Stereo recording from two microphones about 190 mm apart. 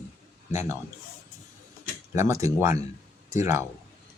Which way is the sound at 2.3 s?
15° right (ahead or behind).